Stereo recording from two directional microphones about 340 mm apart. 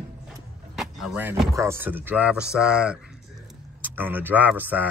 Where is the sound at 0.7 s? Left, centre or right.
Centre.